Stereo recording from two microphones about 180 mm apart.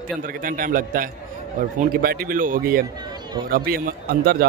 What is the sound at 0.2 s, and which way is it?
A man's voice, 50° right (ahead or behind).